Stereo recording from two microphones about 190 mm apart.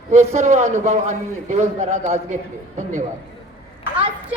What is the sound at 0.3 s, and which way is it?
A man's voice, 40° right (ahead or behind).